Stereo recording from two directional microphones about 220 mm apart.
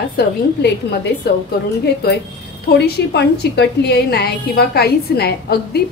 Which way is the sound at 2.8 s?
50° left (ahead or behind).